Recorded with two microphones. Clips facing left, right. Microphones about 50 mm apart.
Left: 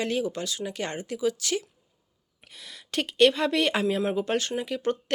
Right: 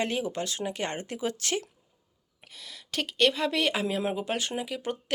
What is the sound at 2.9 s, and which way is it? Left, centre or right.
Speech, centre.